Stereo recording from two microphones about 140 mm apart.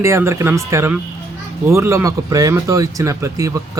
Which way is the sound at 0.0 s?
20° right (ahead or behind).